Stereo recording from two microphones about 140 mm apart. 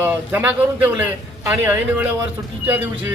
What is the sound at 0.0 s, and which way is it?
Speech, 15° right (ahead or behind).